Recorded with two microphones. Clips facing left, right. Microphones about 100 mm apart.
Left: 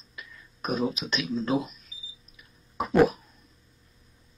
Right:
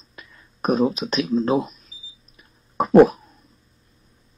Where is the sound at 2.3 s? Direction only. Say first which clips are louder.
Right 8 dB; 40° right (ahead or behind).